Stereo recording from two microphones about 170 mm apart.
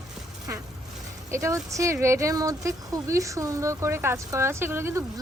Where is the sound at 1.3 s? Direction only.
20° right (ahead or behind).